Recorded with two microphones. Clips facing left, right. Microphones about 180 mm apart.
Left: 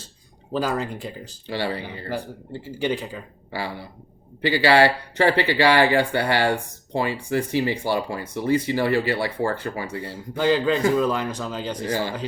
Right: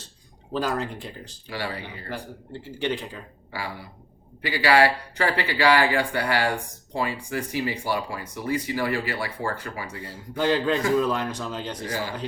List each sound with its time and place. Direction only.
0.5 s a man's voice: 5° left (ahead or behind)
1.5 s speech: 30° left (ahead or behind)
2.5 s a man's voice: 5° left (ahead or behind)
3.5 s speech: 30° left (ahead or behind)
10.3 s a man's voice: centre (ahead or behind)